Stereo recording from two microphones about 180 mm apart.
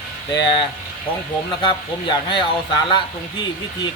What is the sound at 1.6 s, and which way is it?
Speech, 25° left (ahead or behind).